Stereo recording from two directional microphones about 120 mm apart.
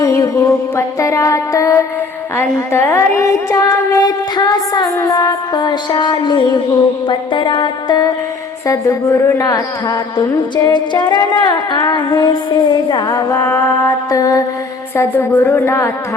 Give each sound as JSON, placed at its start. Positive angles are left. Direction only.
{"t": 0.0, "sound": "music", "side_deg": 25}
{"t": 2.3, "sound": "a woman's voice", "side_deg": 20}
{"t": 7.1, "sound": "music", "side_deg": 40}
{"t": 14.9, "sound": "a woman's voice", "side_deg": 20}